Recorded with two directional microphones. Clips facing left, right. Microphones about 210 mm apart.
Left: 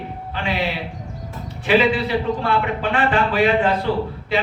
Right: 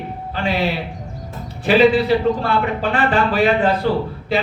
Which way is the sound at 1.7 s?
35° right (ahead or behind).